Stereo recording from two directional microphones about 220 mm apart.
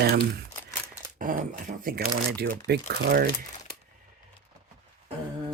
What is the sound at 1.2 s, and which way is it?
Speech, 40° right (ahead or behind).